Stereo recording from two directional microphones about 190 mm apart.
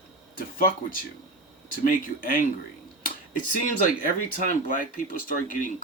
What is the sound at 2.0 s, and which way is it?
Speech, 45° left (ahead or behind).